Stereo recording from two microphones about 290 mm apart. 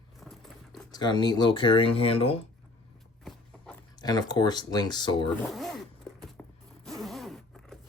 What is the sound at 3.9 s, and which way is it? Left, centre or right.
Speech, centre.